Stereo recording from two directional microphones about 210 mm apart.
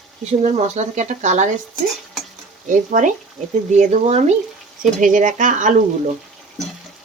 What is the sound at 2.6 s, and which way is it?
Speech, 35° right (ahead or behind).